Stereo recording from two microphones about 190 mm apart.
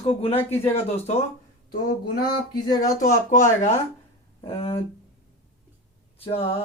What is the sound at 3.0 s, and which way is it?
Speech, 45° left (ahead or behind).